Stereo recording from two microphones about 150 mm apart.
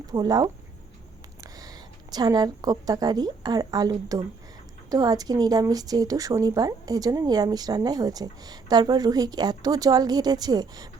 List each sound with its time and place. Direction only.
0.1 s a woman's voice: 25° right (ahead or behind)
1.5 s a woman's voice: 25° right (ahead or behind)